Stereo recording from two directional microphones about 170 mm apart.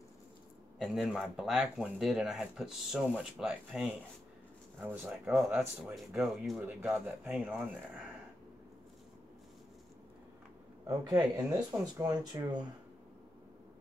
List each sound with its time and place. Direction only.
0.7 s speech: centre (ahead or behind)
10.9 s speech: 25° right (ahead or behind)